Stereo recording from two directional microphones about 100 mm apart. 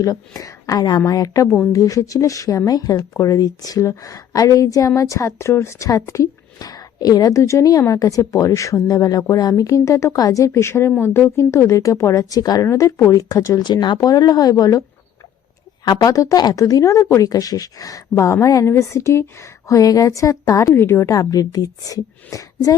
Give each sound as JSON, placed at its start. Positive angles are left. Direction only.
{"t": 0.0, "sound": "speech", "side_deg": 35}
{"t": 13.7, "sound": "speech", "side_deg": 50}
{"t": 21.1, "sound": "speech", "side_deg": 35}